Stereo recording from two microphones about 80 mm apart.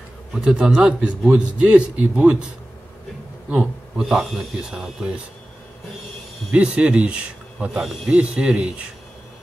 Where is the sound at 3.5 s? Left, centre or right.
Centre.